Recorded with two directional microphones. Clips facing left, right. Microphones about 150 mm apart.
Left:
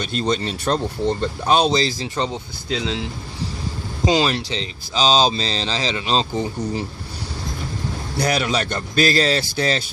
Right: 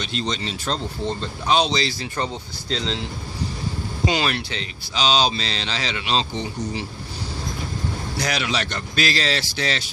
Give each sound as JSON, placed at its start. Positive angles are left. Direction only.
{"t": 0.0, "sound": "speech", "side_deg": 50}
{"t": 2.6, "sound": "speech", "side_deg": 10}
{"t": 4.0, "sound": "speech", "side_deg": 30}
{"t": 8.2, "sound": "speech", "side_deg": 45}